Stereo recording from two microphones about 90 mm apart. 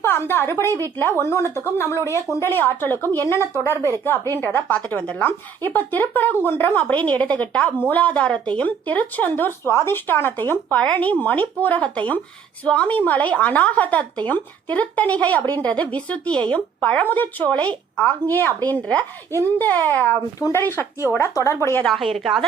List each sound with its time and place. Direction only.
0.0 s a woman's voice: 25° left (ahead or behind)
20.4 s speech: 30° left (ahead or behind)
21.8 s a woman's voice: centre (ahead or behind)